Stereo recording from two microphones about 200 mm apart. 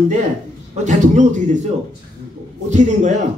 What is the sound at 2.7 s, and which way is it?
Speech, 35° right (ahead or behind).